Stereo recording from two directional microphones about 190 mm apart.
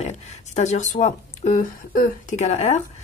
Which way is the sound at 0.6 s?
40° left (ahead or behind).